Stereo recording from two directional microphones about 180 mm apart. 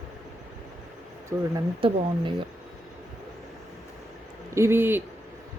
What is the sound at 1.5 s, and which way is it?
Speech, 30° right (ahead or behind).